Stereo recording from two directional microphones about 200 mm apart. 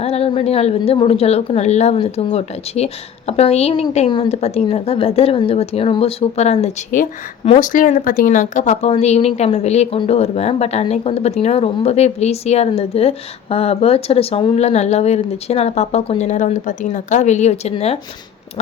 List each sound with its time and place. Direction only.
0.0 s a woman's voice: 30° left (ahead or behind)